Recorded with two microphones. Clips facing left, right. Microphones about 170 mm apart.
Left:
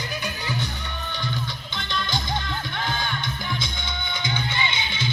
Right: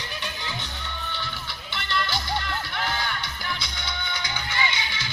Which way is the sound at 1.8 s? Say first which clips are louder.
Right 1 dB; 15° left (ahead or behind).